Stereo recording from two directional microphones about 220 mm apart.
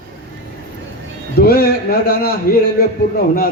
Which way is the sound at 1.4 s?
45° left (ahead or behind).